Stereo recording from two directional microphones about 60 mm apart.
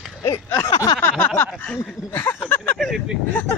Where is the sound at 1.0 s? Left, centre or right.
Left.